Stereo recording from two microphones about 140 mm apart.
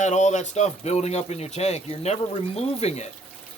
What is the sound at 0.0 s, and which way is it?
Speech, 55° left (ahead or behind).